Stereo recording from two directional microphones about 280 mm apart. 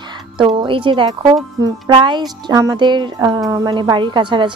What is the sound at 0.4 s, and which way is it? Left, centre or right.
Speech, centre.